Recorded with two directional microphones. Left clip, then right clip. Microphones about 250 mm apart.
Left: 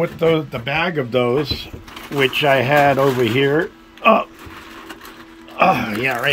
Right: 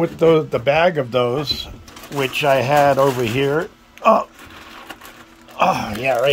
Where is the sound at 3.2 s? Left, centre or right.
Centre.